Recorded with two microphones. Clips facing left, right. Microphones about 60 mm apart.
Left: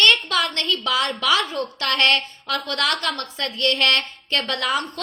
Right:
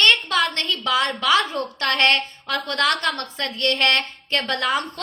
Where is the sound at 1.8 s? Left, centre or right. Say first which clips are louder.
Right 1 dB; right.